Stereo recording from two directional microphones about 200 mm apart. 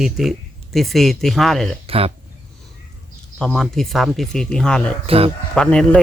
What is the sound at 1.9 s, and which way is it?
Speech, 30° right (ahead or behind).